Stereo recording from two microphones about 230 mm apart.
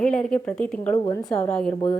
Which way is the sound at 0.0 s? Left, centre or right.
Centre.